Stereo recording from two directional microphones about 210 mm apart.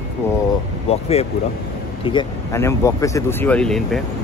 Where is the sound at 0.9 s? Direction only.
30° left (ahead or behind).